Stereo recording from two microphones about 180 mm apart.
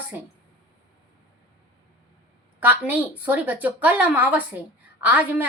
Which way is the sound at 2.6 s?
10° right (ahead or behind).